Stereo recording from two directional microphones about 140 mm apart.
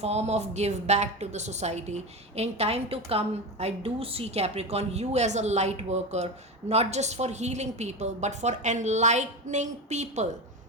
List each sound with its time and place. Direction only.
0.0 s a woman's voice: 50° right (ahead or behind)